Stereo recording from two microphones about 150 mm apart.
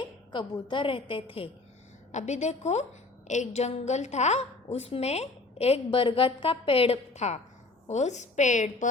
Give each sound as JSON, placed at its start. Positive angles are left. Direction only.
{"t": 0.0, "sound": "a woman's voice", "side_deg": 25}
{"t": 2.1, "sound": "a woman's voice", "side_deg": 50}